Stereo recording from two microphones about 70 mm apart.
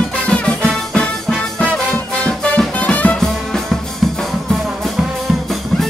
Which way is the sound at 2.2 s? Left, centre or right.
Centre.